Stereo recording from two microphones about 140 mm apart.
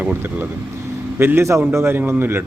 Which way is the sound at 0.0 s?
10° right (ahead or behind).